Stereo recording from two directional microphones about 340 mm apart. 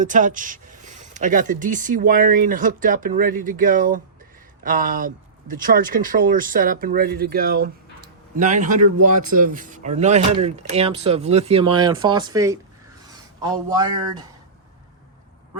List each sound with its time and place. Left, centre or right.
0.0 s speech: right